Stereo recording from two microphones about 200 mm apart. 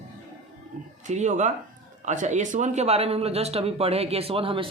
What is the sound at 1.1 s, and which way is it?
Speech, 35° right (ahead or behind).